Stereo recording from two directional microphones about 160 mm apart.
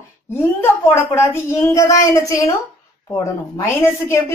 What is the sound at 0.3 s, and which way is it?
A woman's voice, 15° left (ahead or behind).